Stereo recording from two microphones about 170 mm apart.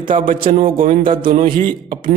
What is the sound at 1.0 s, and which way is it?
Speech, 30° right (ahead or behind).